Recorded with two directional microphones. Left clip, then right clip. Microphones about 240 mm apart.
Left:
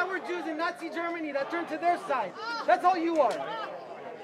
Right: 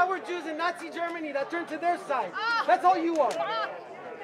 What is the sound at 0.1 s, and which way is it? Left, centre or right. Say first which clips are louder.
A man's voice: right 1 dB; centre.